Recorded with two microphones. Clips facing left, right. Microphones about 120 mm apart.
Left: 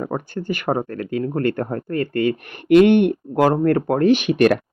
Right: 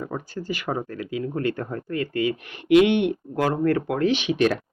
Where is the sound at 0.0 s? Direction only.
55° left (ahead or behind).